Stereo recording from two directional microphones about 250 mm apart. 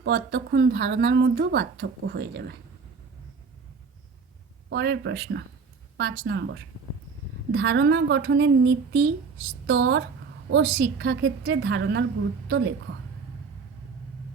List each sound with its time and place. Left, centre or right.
0.0 s speech: right
4.7 s a woman's voice: right
10.8 s a woman's voice: right